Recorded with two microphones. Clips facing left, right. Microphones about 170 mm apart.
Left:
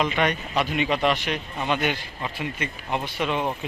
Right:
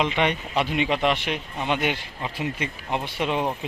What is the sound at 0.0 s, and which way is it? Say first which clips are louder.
Speech: even; 25° right (ahead or behind).